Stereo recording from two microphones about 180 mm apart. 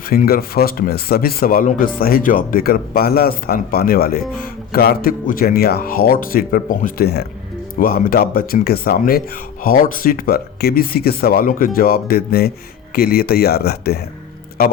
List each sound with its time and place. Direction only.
0.1 s speech: 55° left (ahead or behind)